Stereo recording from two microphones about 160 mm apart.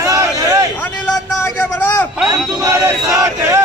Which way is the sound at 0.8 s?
10° left (ahead or behind).